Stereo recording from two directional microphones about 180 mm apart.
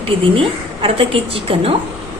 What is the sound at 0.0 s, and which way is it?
A woman's voice, 30° right (ahead or behind).